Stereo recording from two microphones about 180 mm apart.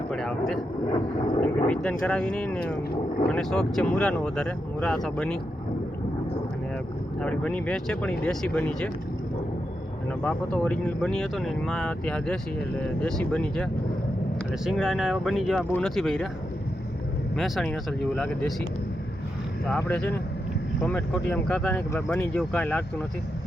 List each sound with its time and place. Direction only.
0.1 s speech: centre (ahead or behind)
0.9 s vehicle: 25° left (ahead or behind)
1.6 s speech: 5° left (ahead or behind)
7.2 s speech: 5° left (ahead or behind)
10.1 s speech: 5° left (ahead or behind)
17.3 s speech: centre (ahead or behind)
19.6 s speech: 5° left (ahead or behind)